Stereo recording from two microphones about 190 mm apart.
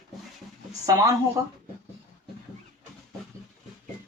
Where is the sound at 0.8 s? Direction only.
20° right (ahead or behind).